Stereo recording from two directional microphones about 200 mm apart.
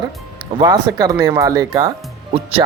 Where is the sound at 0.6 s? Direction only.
20° right (ahead or behind).